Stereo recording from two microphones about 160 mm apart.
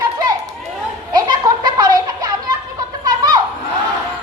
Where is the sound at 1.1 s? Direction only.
25° right (ahead or behind).